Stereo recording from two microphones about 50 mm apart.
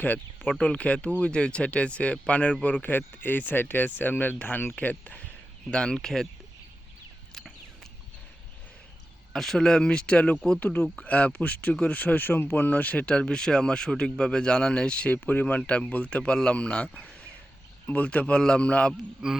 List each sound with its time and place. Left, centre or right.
0.6 s speech: left
2.8 s speech: left
5.7 s speech: centre
9.3 s speech: centre; by 10.3 s left
10.6 s speech: left
15.2 s speech: left
17.8 s speech: left